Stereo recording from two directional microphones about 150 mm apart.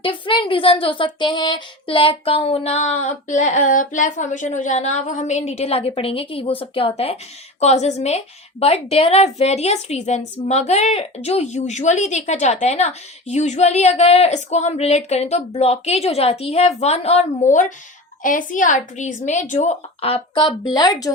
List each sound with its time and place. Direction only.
0.0 s a woman's voice: 35° left (ahead or behind)
20.7 s a woman's voice: 25° left (ahead or behind)